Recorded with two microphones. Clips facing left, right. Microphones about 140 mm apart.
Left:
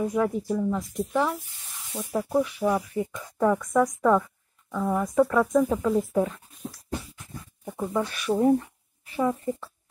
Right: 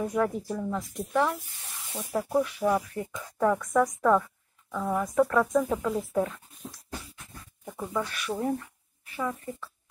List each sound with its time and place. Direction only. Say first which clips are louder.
0.1 s speech: left 3 dB; 10° left (ahead or behind)
7.6 s a sound: left 4 dB; 20° left (ahead or behind)
8.1 s a woman's voice: left 8 dB; 25° left (ahead or behind)